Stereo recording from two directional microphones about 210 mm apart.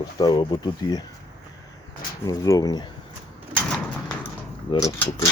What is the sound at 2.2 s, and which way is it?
Speech, 15° left (ahead or behind).